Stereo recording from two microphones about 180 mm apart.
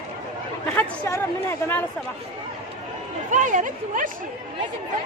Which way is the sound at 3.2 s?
45° right (ahead or behind).